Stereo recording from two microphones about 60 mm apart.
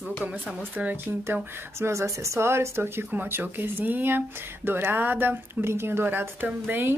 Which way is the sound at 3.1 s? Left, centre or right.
Right.